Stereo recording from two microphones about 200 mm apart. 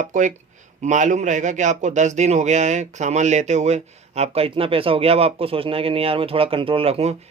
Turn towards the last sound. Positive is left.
turn(degrees=-30)  # may be behind; listen again after turning